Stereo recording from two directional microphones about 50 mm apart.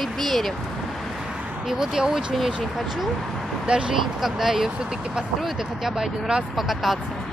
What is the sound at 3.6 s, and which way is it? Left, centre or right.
Speech, right.